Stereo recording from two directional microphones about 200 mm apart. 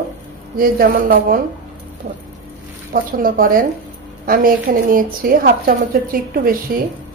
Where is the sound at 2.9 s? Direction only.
45° right (ahead or behind).